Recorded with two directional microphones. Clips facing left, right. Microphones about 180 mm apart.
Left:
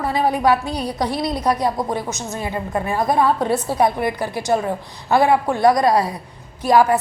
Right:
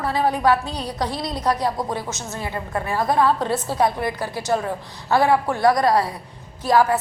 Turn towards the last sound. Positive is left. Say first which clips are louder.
# left 3 dB
turn(degrees=15)  # may be behind; listen again after turning